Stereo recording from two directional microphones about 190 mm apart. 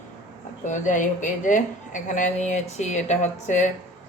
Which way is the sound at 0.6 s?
40° left (ahead or behind).